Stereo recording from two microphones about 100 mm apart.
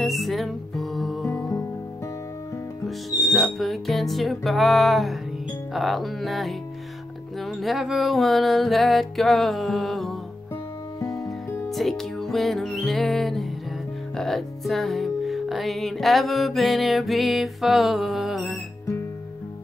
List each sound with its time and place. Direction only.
0.0 s music: centre (ahead or behind)
2.8 s speech: centre (ahead or behind)
11.2 s music: 25° left (ahead or behind)
11.7 s music: centre (ahead or behind)
14.1 s speech: 5° left (ahead or behind)